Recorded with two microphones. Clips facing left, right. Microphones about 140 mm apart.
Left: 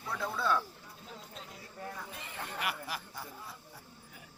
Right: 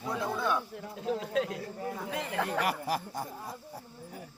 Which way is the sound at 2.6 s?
40° right (ahead or behind).